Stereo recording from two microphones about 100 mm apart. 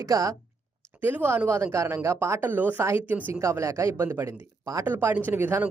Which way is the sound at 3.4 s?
30° right (ahead or behind).